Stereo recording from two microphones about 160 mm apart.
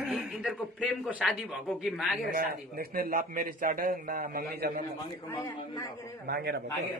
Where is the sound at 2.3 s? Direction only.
65° right (ahead or behind).